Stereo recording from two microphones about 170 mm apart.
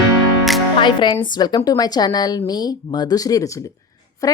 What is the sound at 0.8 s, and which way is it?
A woman's voice, 30° left (ahead or behind).